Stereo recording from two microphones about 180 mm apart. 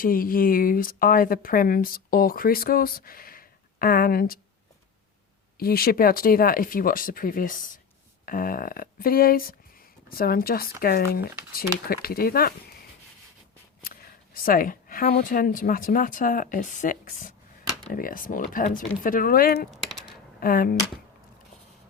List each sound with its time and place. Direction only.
0.0 s speech: 50° left (ahead or behind)
5.5 s speech: 55° left (ahead or behind)
13.8 s a woman's voice: 55° left (ahead or behind)
19.7 s typing: centre (ahead or behind)
20.4 s speech: 55° left (ahead or behind)